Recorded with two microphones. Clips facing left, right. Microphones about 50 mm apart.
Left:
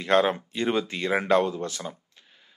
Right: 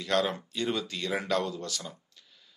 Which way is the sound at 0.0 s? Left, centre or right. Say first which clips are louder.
Left 6 dB; left.